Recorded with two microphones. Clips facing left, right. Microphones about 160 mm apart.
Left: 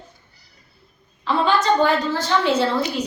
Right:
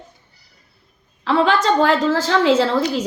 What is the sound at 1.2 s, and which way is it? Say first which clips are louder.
A woman's voice: right 2 dB; 90° right.